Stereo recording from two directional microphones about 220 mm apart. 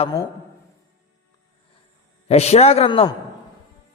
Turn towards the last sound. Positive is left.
turn(degrees=25)  # may be behind; listen again after turning